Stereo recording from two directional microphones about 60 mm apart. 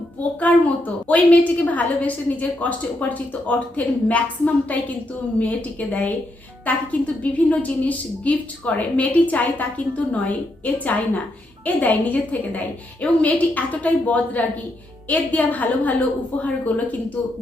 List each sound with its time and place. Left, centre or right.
0.2 s a woman's voice: left